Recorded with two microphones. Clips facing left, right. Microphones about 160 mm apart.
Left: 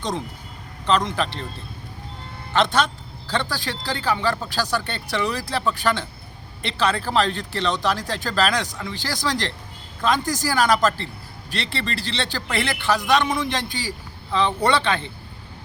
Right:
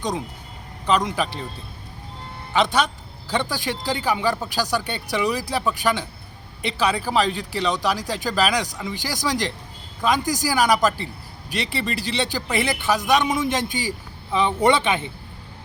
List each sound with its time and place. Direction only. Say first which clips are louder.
0.9 s a man's voice: even; 10° right (ahead or behind)
2.5 s a man's voice: even; 10° right (ahead or behind)